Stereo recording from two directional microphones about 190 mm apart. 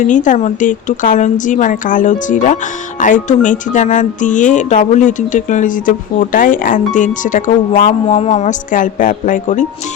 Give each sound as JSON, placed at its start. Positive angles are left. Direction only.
{"t": 0.0, "sound": "speech", "side_deg": 40}